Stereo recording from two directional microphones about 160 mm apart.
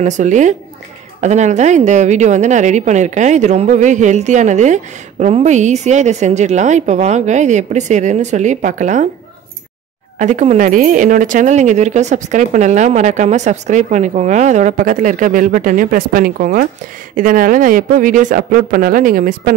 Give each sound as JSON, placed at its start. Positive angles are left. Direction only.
{"t": 0.0, "sound": "a woman's voice", "side_deg": -50}
{"t": 10.1, "sound": "a woman's voice", "side_deg": -50}